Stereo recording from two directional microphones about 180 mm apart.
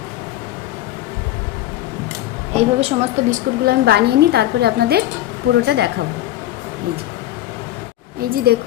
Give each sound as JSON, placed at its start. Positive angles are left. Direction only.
{"t": 2.6, "sound": "a woman's voice", "side_deg": -35}
{"t": 8.2, "sound": "a woman's voice", "side_deg": -55}